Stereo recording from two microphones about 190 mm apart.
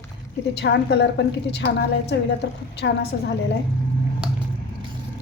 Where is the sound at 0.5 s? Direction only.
65° left (ahead or behind).